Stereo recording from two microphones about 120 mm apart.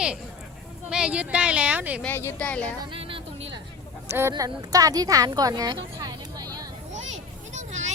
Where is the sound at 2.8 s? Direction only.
45° right (ahead or behind).